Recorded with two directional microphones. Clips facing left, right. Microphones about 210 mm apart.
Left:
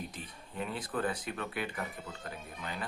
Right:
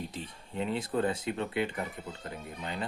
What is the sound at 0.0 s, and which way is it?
Speech, 25° right (ahead or behind).